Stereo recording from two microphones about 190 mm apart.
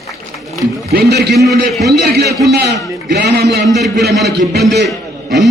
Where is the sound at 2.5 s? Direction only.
60° right (ahead or behind).